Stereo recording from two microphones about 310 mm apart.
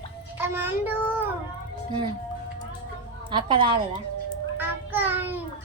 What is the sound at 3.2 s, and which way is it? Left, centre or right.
Speech, centre.